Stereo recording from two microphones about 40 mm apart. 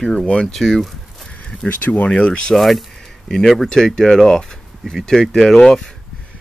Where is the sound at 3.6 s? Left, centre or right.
Centre.